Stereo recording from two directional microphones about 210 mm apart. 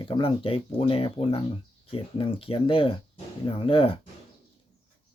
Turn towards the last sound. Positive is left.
turn(degrees=25)  # may be behind; listen again after turning